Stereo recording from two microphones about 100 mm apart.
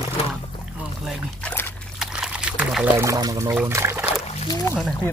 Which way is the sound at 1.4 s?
25° left (ahead or behind).